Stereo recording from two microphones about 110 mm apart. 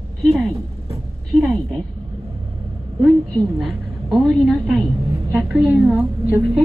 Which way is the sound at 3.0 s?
Centre (ahead or behind).